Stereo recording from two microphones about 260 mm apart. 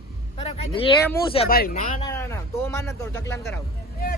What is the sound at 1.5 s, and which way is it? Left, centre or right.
Speech, left.